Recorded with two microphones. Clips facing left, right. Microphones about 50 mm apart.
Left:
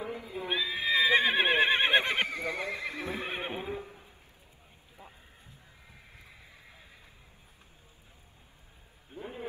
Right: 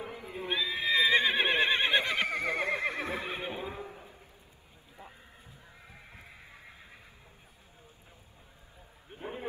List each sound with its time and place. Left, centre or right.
0.2 s neigh: right
0.5 s neigh: centre
1.9 s neigh: left
2.2 s neigh: right
3.3 s neigh: left
3.6 s horse: right
5.9 s a sound: right
9.1 s a sound: right